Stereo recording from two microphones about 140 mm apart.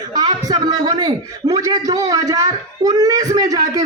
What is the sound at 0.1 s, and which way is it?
A man's voice, 30° right (ahead or behind).